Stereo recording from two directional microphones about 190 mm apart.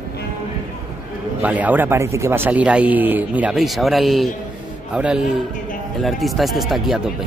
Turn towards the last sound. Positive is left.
turn(degrees=0)  # may be behind; listen again after turning